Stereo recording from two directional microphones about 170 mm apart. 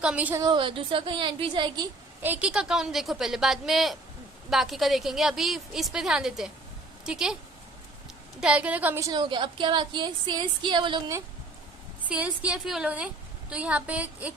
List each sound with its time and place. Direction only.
0.0 s a woman's voice: 5° right (ahead or behind)
0.4 s a woman's voice: 30° right (ahead or behind)
2.2 s a woman's voice: 10° right (ahead or behind)
8.4 s a woman's voice: 5° right (ahead or behind); by 11.1 s 25° right (ahead or behind)
12.0 s a woman's voice: 10° right (ahead or behind)